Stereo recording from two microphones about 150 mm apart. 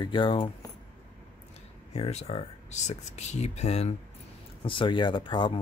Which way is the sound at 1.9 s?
45° left (ahead or behind).